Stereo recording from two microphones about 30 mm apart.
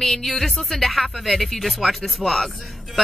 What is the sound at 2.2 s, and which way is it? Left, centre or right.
Speech, centre.